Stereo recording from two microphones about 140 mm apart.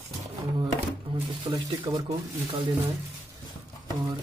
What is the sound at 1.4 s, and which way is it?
Speech, 35° right (ahead or behind).